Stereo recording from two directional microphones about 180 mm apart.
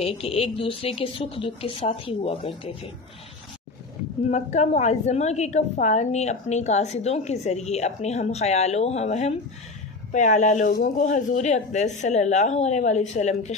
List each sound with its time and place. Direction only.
0.0 s a woman's voice: 35° left (ahead or behind)
4.3 s a woman's voice: 40° left (ahead or behind)